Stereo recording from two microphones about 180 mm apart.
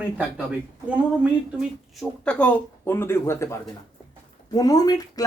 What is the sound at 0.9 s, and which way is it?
Speech, 5° right (ahead or behind).